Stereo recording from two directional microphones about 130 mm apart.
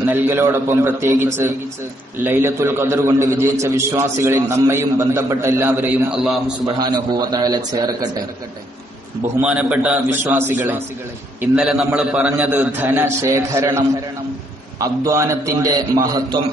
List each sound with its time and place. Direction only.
0.0 s a man's voice: 15° right (ahead or behind)
6.8 s a man's voice: 30° right (ahead or behind)
9.4 s a man's voice: 10° right (ahead or behind); by 16.3 s 30° right (ahead or behind)